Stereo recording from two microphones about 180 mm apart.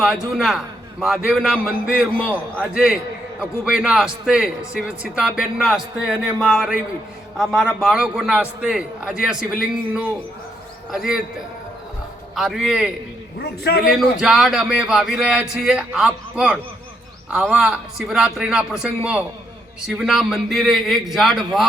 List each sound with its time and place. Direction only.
0.0 s a man's voice: centre (ahead or behind)
3.6 s a man's voice: 5° right (ahead or behind)
13.4 s a man's voice: 65° left (ahead or behind)
14.2 s a man's voice: 5° right (ahead or behind)